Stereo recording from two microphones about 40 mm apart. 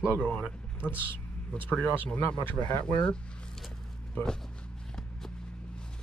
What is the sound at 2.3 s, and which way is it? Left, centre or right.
Speech, left.